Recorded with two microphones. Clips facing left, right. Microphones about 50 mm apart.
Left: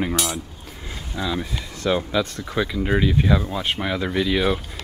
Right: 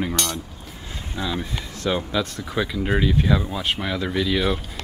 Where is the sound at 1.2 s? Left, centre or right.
Centre.